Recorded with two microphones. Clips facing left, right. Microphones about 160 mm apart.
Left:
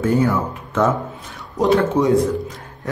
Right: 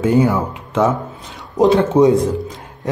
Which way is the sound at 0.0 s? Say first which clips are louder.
Right 3 dB; 15° right (ahead or behind).